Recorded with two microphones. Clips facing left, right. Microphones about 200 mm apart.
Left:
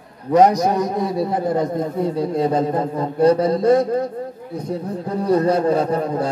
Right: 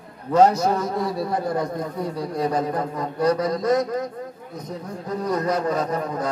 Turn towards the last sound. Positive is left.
turn(degrees=30)  # may be behind; listen again after turning